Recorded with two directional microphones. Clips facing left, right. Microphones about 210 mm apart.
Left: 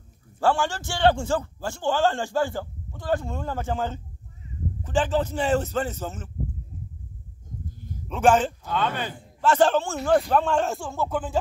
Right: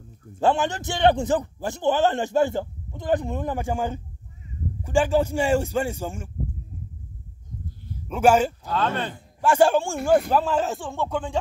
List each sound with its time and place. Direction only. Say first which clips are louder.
0.4 s a man's voice: right 2 dB; 20° right (ahead or behind)
8.1 s a man's voice: right 2 dB; 10° right (ahead or behind)
8.6 s a man's voice: right 2 dB; centre (ahead or behind)
9.4 s a man's voice: right 2 dB; 10° right (ahead or behind); by 11.3 s 5° left (ahead or behind)